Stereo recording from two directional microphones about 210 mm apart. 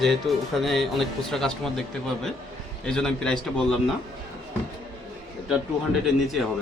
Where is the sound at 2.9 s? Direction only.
5° left (ahead or behind).